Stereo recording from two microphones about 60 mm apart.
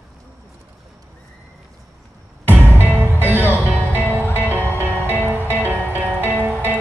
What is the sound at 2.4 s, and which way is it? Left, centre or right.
Music, right.